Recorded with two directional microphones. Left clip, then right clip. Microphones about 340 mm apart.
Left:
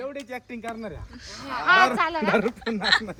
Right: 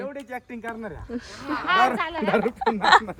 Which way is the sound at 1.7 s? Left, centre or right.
Centre.